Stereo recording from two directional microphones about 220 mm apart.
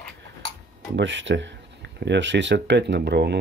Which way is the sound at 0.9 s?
55° right (ahead or behind).